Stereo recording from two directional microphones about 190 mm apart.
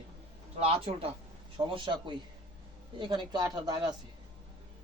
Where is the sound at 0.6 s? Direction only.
30° right (ahead or behind).